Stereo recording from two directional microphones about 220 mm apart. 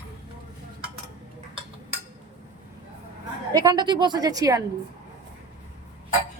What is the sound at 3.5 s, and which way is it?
A woman's voice, 15° right (ahead or behind).